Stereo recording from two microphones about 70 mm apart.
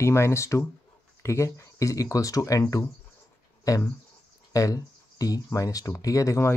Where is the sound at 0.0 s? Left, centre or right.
Left.